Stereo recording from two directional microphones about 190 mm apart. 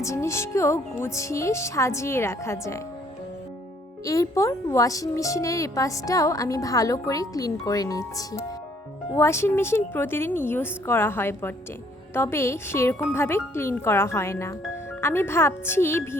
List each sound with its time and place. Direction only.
0.0 s a woman's voice: 15° left (ahead or behind)
4.0 s a woman's voice: 15° left (ahead or behind)